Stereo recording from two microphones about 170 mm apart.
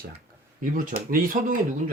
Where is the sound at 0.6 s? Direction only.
55° right (ahead or behind).